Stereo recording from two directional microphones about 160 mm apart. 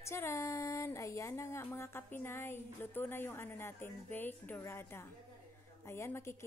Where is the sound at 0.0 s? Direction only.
15° left (ahead or behind).